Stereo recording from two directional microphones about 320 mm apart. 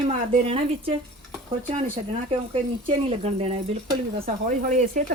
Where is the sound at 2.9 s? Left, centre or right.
Centre.